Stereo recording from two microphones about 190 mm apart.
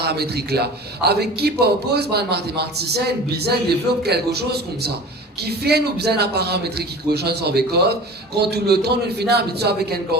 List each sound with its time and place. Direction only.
0.0 s a man's voice: 60° right (ahead or behind)